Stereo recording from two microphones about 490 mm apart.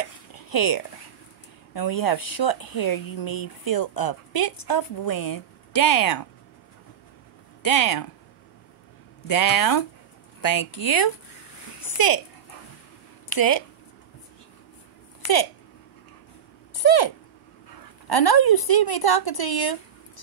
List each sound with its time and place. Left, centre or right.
0.3 s a sound: left
1.7 s speech: left
7.6 s speech: left
9.3 s speech: left
11.8 s a sound: left
13.3 s speech: left
16.7 s speech: left